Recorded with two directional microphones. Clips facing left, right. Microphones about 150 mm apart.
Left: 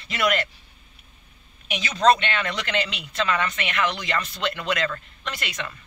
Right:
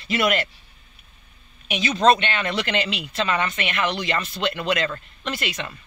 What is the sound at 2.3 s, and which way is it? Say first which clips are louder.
A man's voice: right 2 dB; 20° right (ahead or behind).